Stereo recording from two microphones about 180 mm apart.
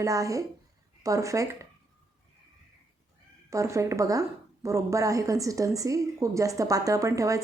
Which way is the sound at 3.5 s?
15° right (ahead or behind).